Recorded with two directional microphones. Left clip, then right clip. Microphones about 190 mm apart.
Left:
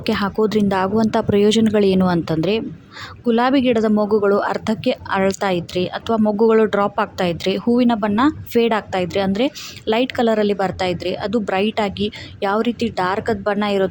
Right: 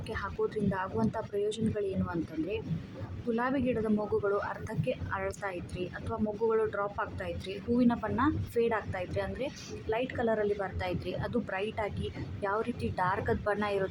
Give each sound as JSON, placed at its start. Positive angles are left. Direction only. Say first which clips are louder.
{"t": 0.0, "sound": "a woman's voice", "louder": "left 15 dB", "side_deg": 50}